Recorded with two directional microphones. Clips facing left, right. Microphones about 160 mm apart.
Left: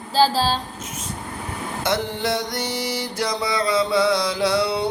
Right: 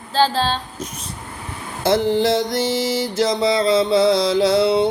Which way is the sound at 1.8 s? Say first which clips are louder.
Right 8 dB; 25° right (ahead or behind).